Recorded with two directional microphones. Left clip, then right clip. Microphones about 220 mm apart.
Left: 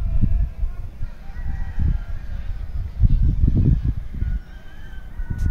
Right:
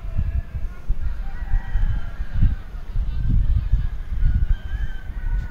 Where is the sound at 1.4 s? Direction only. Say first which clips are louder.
Left 3 dB; 45° left (ahead or behind).